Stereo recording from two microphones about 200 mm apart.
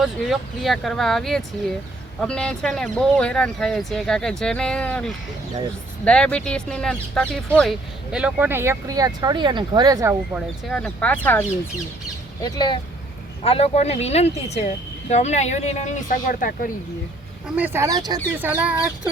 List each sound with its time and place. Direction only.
0.0 s speech: centre (ahead or behind); by 10.2 s 15° right (ahead or behind)
10.3 s speech: 5° left (ahead or behind)
12.4 s speech: 20° left (ahead or behind); by 16.7 s 40° left (ahead or behind)
17.6 s speech: 10° right (ahead or behind)